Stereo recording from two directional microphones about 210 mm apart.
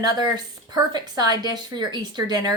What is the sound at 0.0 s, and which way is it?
A woman's voice, 20° right (ahead or behind).